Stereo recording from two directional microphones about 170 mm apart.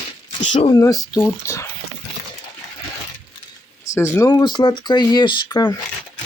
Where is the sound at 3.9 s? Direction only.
15° left (ahead or behind).